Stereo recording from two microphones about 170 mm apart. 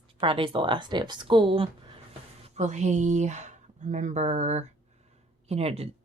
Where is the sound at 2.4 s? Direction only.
40° right (ahead or behind).